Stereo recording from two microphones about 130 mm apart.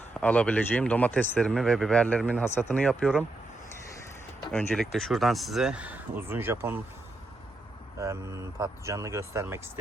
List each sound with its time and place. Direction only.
0.2 s speech: 10° left (ahead or behind)
4.5 s speech: 5° left (ahead or behind); by 6.7 s 20° right (ahead or behind)
7.9 s speech: 25° right (ahead or behind)